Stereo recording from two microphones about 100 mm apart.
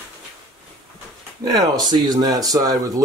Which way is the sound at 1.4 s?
40° right (ahead or behind).